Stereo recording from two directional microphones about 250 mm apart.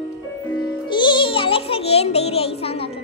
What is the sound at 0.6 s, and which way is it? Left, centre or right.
Music, centre.